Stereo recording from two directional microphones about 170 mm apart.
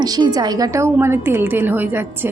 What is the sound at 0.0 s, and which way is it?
A woman's voice, 25° right (ahead or behind).